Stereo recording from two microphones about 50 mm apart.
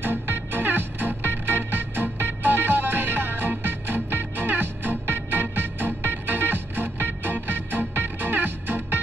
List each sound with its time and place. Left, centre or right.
0.0 s music: right